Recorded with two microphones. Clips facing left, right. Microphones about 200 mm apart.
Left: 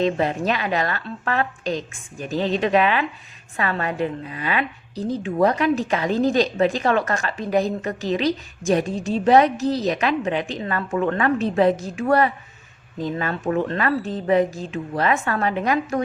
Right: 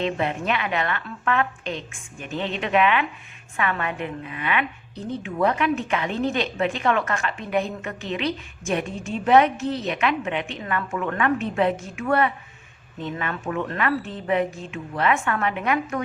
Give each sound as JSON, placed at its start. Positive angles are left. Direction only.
{"t": 0.0, "sound": "a woman's voice", "side_deg": 35}